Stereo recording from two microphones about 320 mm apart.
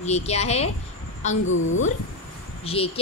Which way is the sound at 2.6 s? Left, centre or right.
Centre.